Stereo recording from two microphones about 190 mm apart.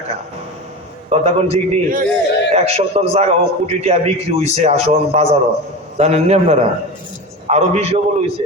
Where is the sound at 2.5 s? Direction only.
35° right (ahead or behind).